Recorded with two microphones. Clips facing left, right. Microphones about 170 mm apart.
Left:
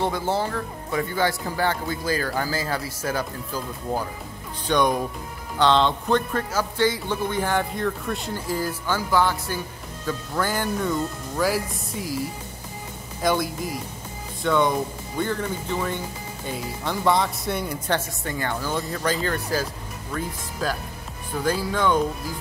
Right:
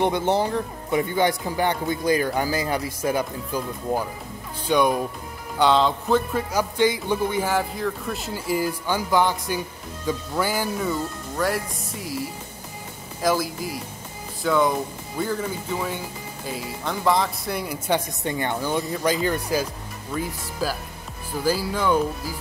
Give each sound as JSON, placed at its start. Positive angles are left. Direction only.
{"t": 0.0, "sound": "a man's voice", "side_deg": -20}
{"t": 17.8, "sound": "a man's voice", "side_deg": -15}